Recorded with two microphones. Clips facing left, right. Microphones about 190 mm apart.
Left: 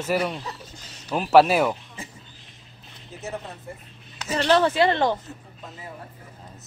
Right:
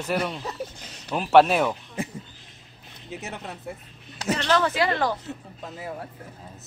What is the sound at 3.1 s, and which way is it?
Speech, 75° right (ahead or behind).